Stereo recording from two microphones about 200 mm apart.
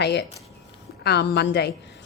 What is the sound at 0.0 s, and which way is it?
A woman's voice, 55° left (ahead or behind).